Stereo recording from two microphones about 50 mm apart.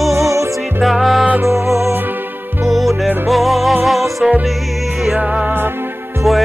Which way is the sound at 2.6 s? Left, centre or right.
Centre.